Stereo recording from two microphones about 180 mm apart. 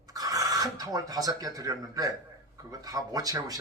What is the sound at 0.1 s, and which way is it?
Speech, 20° right (ahead or behind).